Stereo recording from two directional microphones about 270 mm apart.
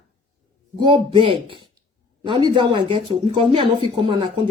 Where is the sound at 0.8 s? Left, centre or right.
Centre.